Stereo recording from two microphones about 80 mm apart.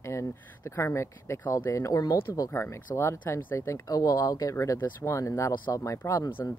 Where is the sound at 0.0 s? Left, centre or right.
Left.